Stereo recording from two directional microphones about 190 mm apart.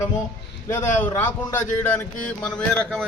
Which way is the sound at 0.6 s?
15° left (ahead or behind).